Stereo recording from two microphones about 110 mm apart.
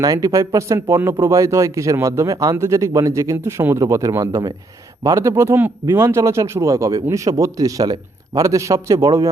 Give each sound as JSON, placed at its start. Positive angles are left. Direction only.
{"t": 0.0, "sound": "speech", "side_deg": -35}
{"t": 3.3, "sound": "speech", "side_deg": -20}